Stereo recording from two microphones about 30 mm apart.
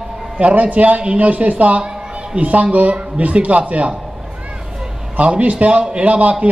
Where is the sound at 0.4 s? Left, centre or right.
Right.